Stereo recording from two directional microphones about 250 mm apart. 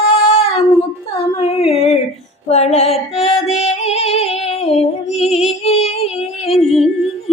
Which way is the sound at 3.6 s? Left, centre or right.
Left.